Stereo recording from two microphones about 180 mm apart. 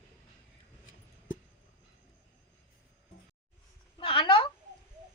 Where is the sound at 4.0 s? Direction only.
30° left (ahead or behind).